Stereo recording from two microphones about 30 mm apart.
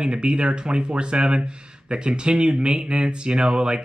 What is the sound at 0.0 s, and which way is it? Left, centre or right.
Speech, right.